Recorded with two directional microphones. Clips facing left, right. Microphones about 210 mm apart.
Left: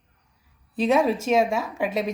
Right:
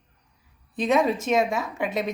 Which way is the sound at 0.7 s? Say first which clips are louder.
Left 1 dB; 10° left (ahead or behind).